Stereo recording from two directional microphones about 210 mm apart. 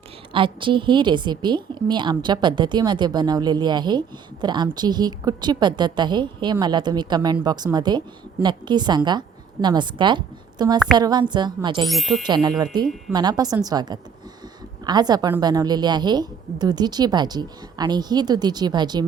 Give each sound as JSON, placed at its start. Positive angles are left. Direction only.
{"t": 0.3, "sound": "a woman's voice", "side_deg": -25}
{"t": 11.9, "sound": "speech", "side_deg": 0}
{"t": 12.2, "sound": "a woman's voice", "side_deg": -20}